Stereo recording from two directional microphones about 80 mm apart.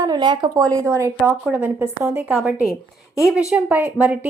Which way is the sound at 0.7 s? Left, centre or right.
Right.